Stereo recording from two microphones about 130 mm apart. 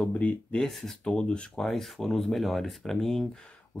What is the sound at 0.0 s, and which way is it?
Speech, 10° left (ahead or behind).